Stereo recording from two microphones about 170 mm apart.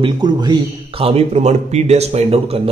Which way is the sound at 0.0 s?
25° right (ahead or behind).